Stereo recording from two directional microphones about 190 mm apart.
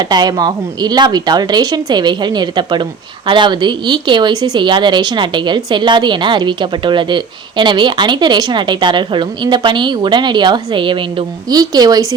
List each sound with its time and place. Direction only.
0.1 s speech: 20° right (ahead or behind)